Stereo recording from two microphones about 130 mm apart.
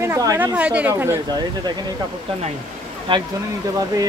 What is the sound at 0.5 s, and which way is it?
Speech, 10° right (ahead or behind).